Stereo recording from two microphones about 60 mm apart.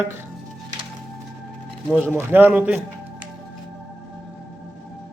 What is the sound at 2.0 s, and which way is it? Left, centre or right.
Speech, right.